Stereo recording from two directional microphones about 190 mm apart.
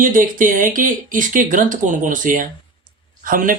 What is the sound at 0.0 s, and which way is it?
A man's voice, 45° right (ahead or behind).